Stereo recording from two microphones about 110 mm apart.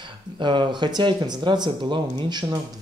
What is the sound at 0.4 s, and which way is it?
A man's voice, 45° right (ahead or behind).